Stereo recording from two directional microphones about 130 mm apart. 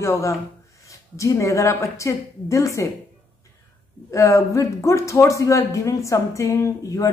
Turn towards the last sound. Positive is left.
turn(degrees=25)  # may be behind; listen again after turning